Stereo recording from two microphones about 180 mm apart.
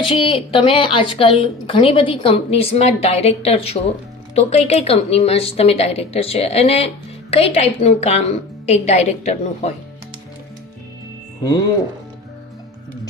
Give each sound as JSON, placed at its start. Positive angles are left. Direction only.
{"t": 0.0, "sound": "a woman's voice", "side_deg": 30}